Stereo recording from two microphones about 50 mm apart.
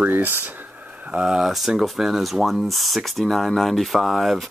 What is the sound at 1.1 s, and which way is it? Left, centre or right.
Speech, centre.